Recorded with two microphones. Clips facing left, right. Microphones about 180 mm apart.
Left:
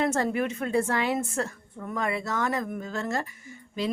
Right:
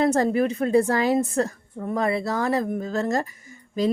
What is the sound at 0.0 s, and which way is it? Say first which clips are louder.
A woman's voice: right 6 dB; 35° right (ahead or behind).